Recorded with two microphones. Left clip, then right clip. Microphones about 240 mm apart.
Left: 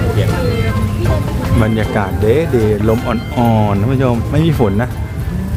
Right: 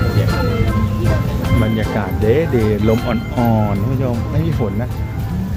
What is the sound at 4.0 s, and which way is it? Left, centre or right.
Speech, left.